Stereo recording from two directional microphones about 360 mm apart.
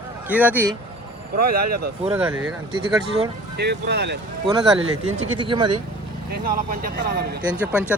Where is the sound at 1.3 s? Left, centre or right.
Right.